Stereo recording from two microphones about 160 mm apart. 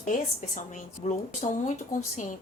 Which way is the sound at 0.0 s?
55° left (ahead or behind).